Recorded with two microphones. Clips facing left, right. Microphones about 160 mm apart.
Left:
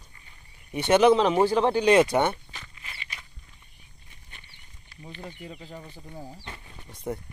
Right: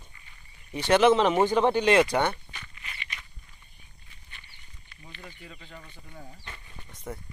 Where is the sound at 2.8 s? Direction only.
35° left (ahead or behind).